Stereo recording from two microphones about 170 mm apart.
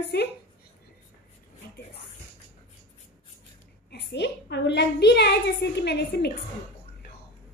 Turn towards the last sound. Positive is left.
turn(degrees=75)  # may be behind; listen again after turning